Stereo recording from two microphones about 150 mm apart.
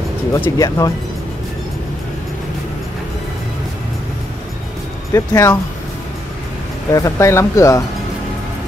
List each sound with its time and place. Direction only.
0.3 s speech: 20° left (ahead or behind)
5.1 s speech: 20° left (ahead or behind)
6.9 s speech: 20° left (ahead or behind)